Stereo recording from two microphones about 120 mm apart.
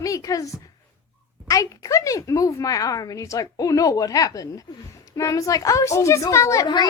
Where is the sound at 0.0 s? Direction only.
30° left (ahead or behind).